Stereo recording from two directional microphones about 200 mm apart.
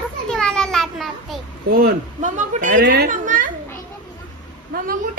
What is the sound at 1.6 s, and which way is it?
Speech, 50° right (ahead or behind).